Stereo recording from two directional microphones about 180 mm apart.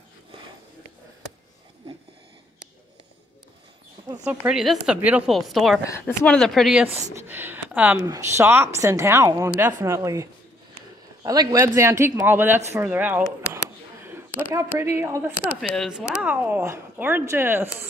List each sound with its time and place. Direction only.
4.2 s a woman's voice: 5° right (ahead or behind)
7.0 s speech: 15° right (ahead or behind)
11.2 s speech: 15° right (ahead or behind)
14.4 s speech: 15° right (ahead or behind)
15.6 s speech: centre (ahead or behind)